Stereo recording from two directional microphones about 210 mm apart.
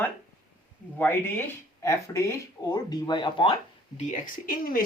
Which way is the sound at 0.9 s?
10° left (ahead or behind).